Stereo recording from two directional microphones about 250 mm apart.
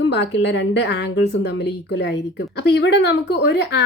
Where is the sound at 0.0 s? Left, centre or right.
Left.